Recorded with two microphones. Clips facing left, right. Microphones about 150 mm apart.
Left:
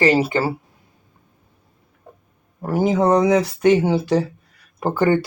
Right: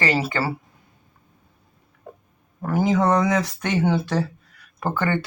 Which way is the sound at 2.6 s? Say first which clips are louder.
Left 2 dB; 30° left (ahead or behind).